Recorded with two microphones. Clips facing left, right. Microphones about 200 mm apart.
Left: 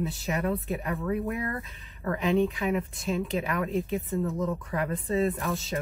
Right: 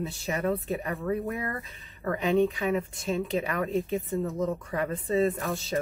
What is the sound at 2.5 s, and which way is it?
Speech, 35° right (ahead or behind).